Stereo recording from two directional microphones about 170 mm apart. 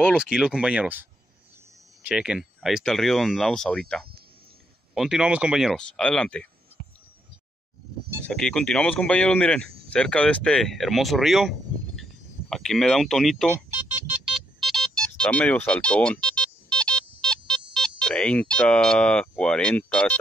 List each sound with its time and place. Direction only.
0.1 s speech: 5° right (ahead or behind)
2.0 s speech: 5° right (ahead or behind)
4.9 s speech: 5° right (ahead or behind)
8.3 s speech: 5° left (ahead or behind)
13.7 s music: 15° right (ahead or behind); by 20.2 s 5° left (ahead or behind)